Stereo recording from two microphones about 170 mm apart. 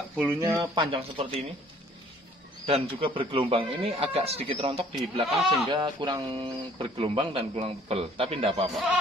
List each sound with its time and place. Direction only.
0.1 s speech: 10° right (ahead or behind); by 1.4 s 30° right (ahead or behind)
2.6 s speech: 35° right (ahead or behind)
5.2 s speech: centre (ahead or behind)
5.7 s speech: 25° right (ahead or behind)